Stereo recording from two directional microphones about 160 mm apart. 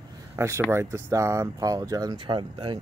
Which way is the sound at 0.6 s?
15° right (ahead or behind).